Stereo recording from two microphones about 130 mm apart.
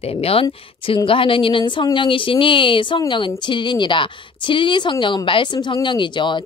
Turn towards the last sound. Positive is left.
turn(degrees=35)  # may be behind; listen again after turning